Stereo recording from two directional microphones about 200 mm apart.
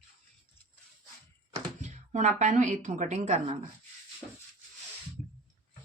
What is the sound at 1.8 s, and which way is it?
A woman's voice, 35° right (ahead or behind).